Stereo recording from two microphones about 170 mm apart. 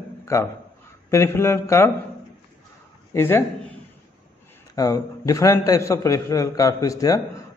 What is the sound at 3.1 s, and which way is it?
Speech, 15° left (ahead or behind).